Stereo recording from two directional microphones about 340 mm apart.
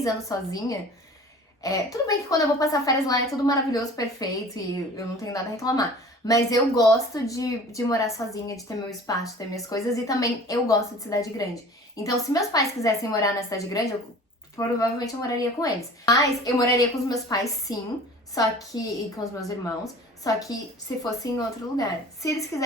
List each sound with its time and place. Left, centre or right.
0.0 s a woman's voice: centre
1.6 s a woman's voice: centre